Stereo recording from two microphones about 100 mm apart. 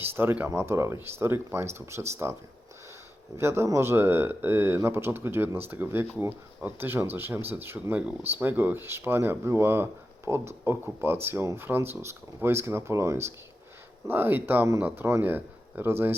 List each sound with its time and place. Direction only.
0.0 s speech: 20° right (ahead or behind)
3.3 s speech: 25° right (ahead or behind)